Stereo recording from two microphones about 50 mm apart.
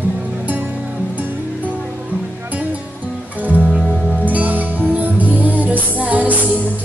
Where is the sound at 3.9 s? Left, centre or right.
Right.